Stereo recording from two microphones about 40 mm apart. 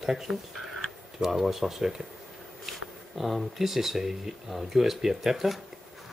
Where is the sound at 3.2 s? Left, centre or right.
Centre.